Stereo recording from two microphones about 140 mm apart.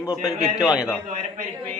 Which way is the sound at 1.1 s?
65° right (ahead or behind).